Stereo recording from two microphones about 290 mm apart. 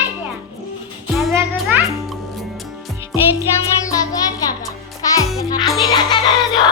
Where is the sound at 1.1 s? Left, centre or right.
Centre.